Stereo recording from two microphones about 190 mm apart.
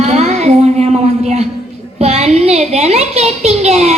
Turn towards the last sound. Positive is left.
turn(degrees=-35)  # may be behind; listen again after turning